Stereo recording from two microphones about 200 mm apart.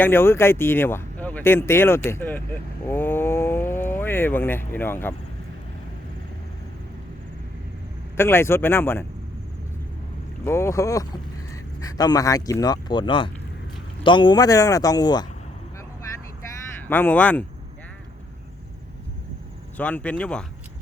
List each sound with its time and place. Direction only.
0.0 s speech: 10° left (ahead or behind)
8.1 s speech: 10° left (ahead or behind)
10.4 s speech: 15° left (ahead or behind)
16.9 s speech: 10° left (ahead or behind)
19.7 s speech: 5° left (ahead or behind)